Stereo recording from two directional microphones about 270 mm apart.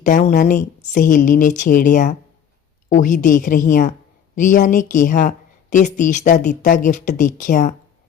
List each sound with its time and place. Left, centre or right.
0.0 s a woman's voice: left